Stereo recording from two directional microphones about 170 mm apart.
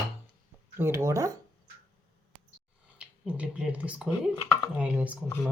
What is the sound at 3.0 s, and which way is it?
Speech, 5° right (ahead or behind).